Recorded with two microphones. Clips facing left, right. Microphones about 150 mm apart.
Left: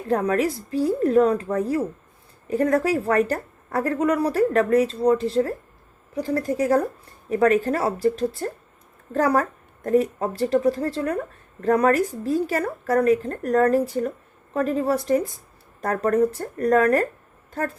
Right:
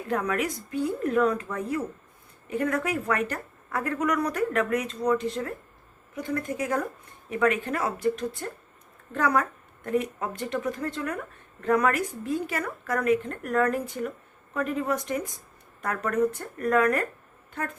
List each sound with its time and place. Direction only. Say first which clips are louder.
0.1 s speech: left 6 dB; 35° left (ahead or behind)